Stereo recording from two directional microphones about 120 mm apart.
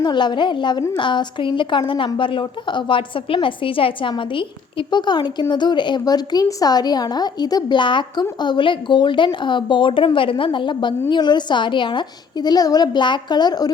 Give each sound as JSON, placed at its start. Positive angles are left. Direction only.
{"t": 0.0, "sound": "a woman's voice", "side_deg": 40}